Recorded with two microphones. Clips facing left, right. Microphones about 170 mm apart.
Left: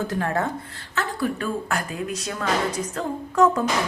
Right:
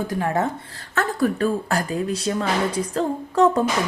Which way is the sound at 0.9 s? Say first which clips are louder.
Right 5 dB; 45° right (ahead or behind).